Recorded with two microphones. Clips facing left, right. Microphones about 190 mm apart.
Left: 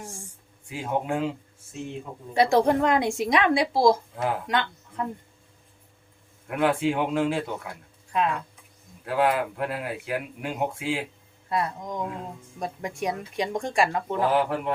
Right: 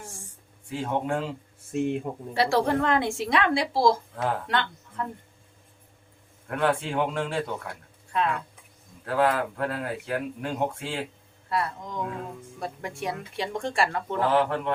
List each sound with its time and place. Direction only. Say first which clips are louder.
0.7 s a woman's voice: even; 5° left (ahead or behind)
1.7 s speech: right 9 dB; 60° right (ahead or behind)
2.3 s a woman's voice: left 3 dB; 20° left (ahead or behind)
6.5 s speech: left 2 dB; 5° left (ahead or behind)
9.0 s a woman's voice: even; 10° left (ahead or behind)
11.4 s a woman's voice: left 1 dB; 20° left (ahead or behind)